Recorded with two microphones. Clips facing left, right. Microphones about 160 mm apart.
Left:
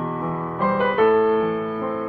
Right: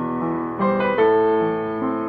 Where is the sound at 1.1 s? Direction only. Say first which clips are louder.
Right 1 dB; 35° right (ahead or behind).